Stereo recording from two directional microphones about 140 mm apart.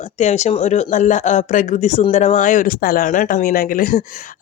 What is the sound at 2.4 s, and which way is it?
Speech, 70° left (ahead or behind).